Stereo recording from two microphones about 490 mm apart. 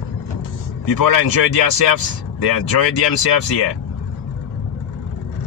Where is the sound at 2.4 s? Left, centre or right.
Left.